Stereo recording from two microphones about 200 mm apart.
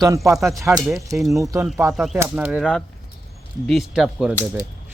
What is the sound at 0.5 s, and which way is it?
Speech, 15° right (ahead or behind).